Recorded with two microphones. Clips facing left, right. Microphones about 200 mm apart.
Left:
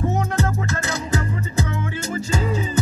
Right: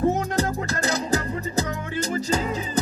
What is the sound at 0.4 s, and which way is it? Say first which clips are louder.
Music: left 1 dB; 35° right (ahead or behind).